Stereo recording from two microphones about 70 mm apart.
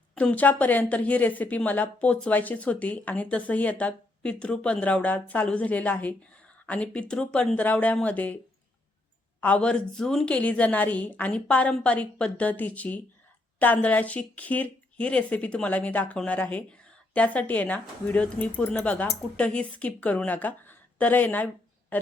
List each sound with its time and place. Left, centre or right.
0.1 s a woman's voice: centre
9.4 s a woman's voice: centre